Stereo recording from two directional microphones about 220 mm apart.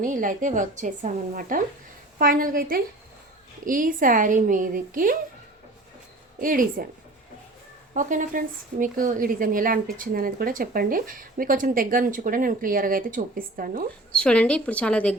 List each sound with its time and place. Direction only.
0.0 s a woman's voice: 35° right (ahead or behind)
6.4 s a woman's voice: 40° right (ahead or behind)
7.9 s a woman's voice: 35° right (ahead or behind)
14.2 s a woman's voice: 5° left (ahead or behind)